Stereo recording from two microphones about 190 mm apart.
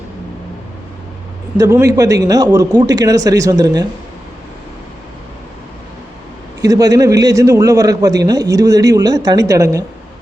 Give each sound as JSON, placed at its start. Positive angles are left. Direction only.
{"t": 1.5, "sound": "a man's voice", "side_deg": -15}
{"t": 6.6, "sound": "a man's voice", "side_deg": -20}